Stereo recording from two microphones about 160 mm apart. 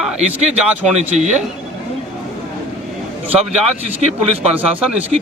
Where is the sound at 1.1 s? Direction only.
45° right (ahead or behind).